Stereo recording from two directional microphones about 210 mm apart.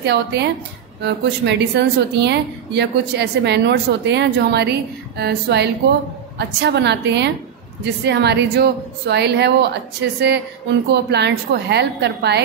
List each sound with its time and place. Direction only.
0.0 s speech: 50° right (ahead or behind)
10.9 s speech: 55° right (ahead or behind)